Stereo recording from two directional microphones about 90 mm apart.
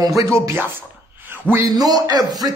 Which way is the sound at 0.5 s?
25° right (ahead or behind).